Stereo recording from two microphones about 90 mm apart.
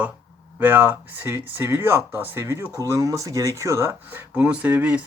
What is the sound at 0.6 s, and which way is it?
Speech, 20° right (ahead or behind).